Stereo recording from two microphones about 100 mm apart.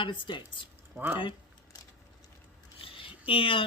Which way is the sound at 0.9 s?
20° right (ahead or behind).